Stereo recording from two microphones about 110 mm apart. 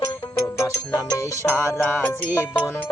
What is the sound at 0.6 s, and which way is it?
Music, 30° left (ahead or behind).